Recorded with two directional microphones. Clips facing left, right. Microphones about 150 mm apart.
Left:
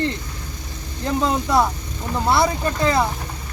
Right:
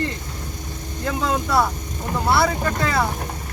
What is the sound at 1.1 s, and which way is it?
Speech, 20° left (ahead or behind).